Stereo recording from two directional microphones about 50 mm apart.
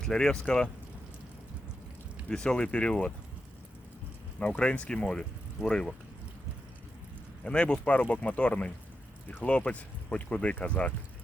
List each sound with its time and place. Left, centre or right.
0.0 s speech: centre
2.3 s speech: centre
4.6 s speech: centre
7.4 s speech: left